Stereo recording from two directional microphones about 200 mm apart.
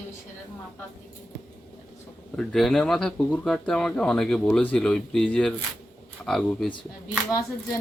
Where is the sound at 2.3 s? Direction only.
Centre (ahead or behind).